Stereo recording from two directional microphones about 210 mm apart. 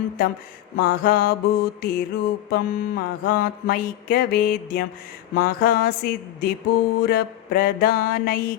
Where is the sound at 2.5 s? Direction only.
45° left (ahead or behind).